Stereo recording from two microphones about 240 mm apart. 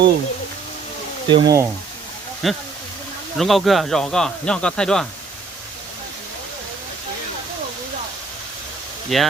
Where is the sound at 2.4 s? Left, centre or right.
Centre.